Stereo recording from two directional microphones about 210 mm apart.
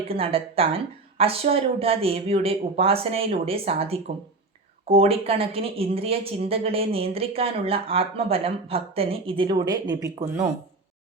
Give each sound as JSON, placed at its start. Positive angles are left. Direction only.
{"t": 0.1, "sound": "speech", "side_deg": -25}